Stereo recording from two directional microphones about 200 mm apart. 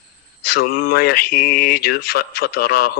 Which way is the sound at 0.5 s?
50° left (ahead or behind).